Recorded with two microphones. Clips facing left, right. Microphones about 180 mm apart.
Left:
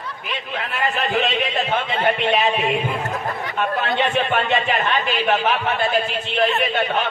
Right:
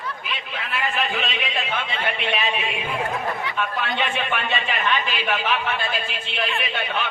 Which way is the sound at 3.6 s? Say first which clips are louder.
Left 6 dB; 45° left (ahead or behind).